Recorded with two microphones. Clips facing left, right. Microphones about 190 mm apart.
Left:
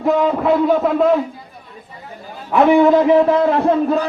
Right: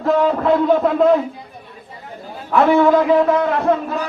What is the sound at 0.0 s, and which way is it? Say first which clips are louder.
Speech: even; 5° left (ahead or behind).